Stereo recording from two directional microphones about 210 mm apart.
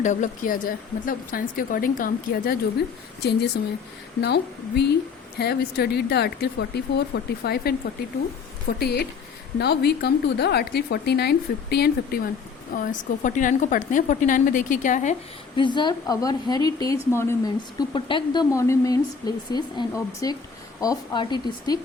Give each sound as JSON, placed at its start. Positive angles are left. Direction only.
{"t": 0.0, "sound": "speech", "side_deg": 35}
{"t": 4.2, "sound": "speech", "side_deg": 50}
{"t": 8.8, "sound": "speech", "side_deg": 50}
{"t": 12.7, "sound": "speech", "side_deg": 40}
{"t": 15.5, "sound": "a woman's voice", "side_deg": 20}